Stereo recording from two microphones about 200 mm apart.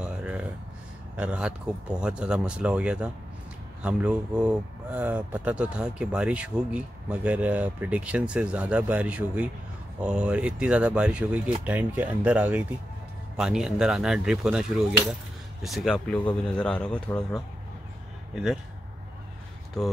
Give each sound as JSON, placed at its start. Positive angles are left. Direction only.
{"t": 0.0, "sound": "a sound", "side_deg": -5}
{"t": 1.1, "sound": "speech", "side_deg": -5}
{"t": 19.8, "sound": "speech", "side_deg": 0}